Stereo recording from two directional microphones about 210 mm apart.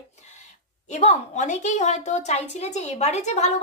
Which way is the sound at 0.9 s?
35° left (ahead or behind).